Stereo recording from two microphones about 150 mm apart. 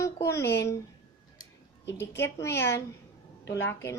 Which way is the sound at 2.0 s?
15° left (ahead or behind).